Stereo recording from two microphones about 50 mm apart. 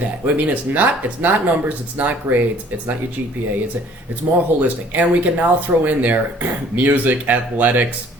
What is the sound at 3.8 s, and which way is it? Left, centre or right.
Speech, right.